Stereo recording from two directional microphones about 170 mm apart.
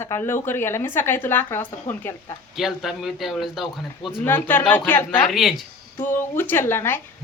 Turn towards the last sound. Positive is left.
turn(degrees=15)  # may be behind; listen again after turning